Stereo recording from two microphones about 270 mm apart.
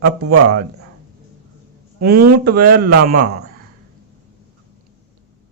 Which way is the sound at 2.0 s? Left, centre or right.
Right.